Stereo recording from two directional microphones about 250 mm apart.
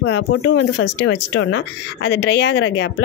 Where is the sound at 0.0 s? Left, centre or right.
Left.